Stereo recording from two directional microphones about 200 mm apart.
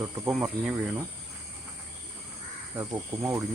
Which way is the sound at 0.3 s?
5° right (ahead or behind).